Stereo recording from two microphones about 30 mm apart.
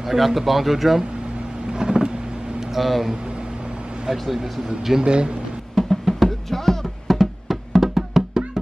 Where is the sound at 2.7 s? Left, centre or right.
Centre.